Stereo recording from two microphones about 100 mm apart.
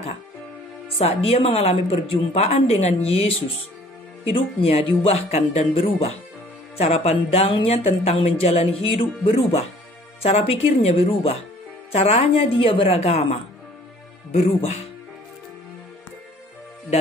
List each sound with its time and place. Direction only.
0.8 s speech: 70° left (ahead or behind)
4.2 s speech: 60° left (ahead or behind)
10.2 s speech: 85° left